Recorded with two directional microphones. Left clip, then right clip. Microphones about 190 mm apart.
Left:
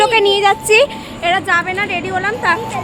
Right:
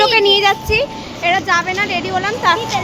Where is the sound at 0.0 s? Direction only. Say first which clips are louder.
Even; 10° left (ahead or behind).